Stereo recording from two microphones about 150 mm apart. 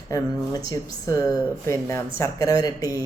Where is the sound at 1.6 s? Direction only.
20° left (ahead or behind).